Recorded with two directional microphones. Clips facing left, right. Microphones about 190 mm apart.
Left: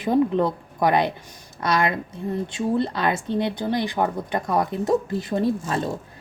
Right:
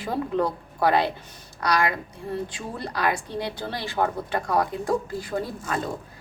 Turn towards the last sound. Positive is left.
turn(degrees=25)  # may be behind; listen again after turning